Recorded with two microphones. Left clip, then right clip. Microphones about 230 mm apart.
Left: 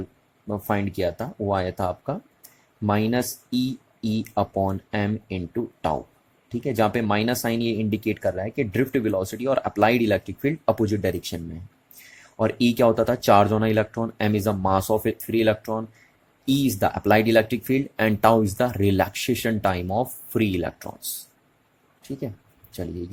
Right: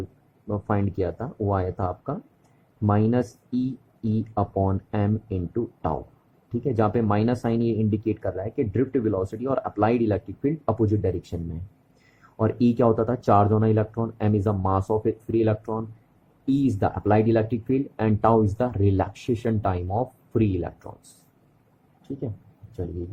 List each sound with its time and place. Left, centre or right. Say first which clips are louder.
0.4 s speech: left 1 dB; left
6.5 s speech: left 1 dB; left
9.6 s speech: left 4 dB; left
9.9 s speech: left 2 dB; left
12.4 s speech: left 2 dB; centre
17.0 s speech: left 3 dB; left